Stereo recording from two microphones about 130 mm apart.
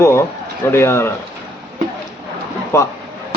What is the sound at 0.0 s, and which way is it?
A man's voice, 20° left (ahead or behind).